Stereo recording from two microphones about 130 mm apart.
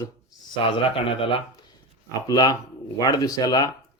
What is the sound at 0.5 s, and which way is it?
Speech, 45° left (ahead or behind).